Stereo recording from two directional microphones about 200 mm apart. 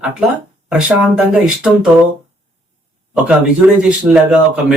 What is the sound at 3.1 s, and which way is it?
Speech, 5° right (ahead or behind).